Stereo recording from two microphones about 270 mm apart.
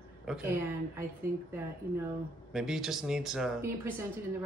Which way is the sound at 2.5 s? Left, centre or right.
Centre.